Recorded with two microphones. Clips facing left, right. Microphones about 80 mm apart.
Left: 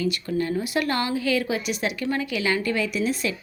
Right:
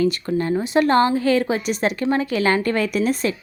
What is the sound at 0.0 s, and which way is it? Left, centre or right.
A woman's voice, right.